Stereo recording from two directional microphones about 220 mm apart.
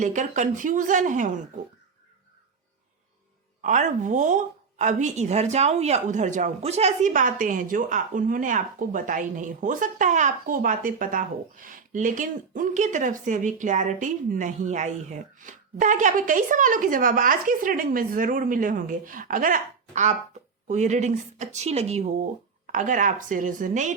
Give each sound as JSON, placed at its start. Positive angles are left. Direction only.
{"t": 0.0, "sound": "a woman's voice", "side_deg": -35}
{"t": 3.6, "sound": "a woman's voice", "side_deg": -35}